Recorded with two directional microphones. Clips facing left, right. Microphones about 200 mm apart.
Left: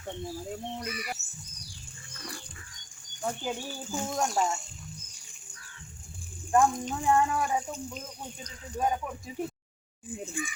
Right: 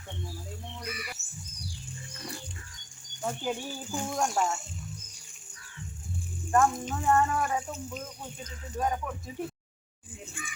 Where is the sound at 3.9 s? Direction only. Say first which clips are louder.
Left 1 dB; 15° right (ahead or behind).